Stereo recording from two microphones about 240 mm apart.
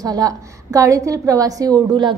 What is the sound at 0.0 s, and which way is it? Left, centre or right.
A woman's voice, centre.